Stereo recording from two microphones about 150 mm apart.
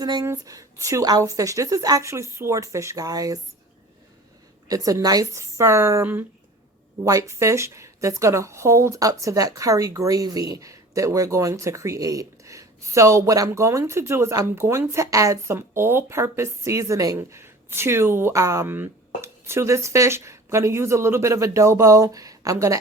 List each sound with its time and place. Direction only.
0.0 s a woman's voice: 25° right (ahead or behind)
4.7 s a woman's voice: 25° right (ahead or behind)